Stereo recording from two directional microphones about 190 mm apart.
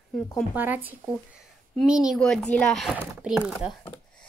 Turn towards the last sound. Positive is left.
turn(degrees=-5)  # may be behind; listen again after turning